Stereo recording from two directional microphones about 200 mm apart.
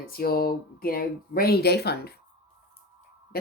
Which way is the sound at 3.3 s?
50° left (ahead or behind).